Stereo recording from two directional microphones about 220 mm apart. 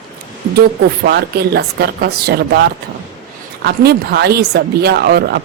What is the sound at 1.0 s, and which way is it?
Speech, 45° right (ahead or behind).